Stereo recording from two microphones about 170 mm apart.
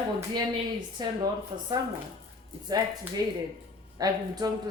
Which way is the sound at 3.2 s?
25° right (ahead or behind).